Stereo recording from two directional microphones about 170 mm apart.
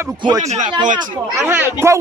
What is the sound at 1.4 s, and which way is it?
Speech, 10° right (ahead or behind).